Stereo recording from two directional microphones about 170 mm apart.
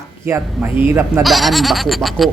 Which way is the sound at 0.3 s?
15° right (ahead or behind).